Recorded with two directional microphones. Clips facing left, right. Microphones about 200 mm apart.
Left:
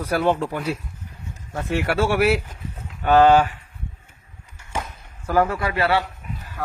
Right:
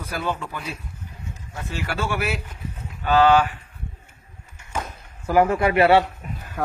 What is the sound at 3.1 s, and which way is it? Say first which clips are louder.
Speech: left 2 dB; 40° left (ahead or behind).